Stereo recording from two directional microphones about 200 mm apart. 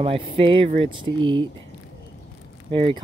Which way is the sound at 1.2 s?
70° right (ahead or behind).